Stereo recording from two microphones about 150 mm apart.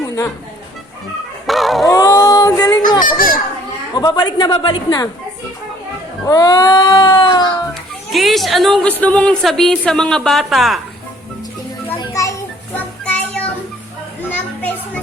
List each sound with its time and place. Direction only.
1.5 s dog: centre (ahead or behind)
1.9 s female singing: 20° left (ahead or behind)
3.1 s children playing: 70° left (ahead or behind)
3.9 s cat: 25° left (ahead or behind)
6.2 s cat: 25° left (ahead or behind)
7.7 s a woman's voice: centre (ahead or behind)
11.9 s children playing: 20° left (ahead or behind)
13.1 s music: 10° left (ahead or behind)
14.3 s children playing: 15° left (ahead or behind)